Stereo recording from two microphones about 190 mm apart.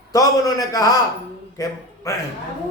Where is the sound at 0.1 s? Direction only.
20° left (ahead or behind).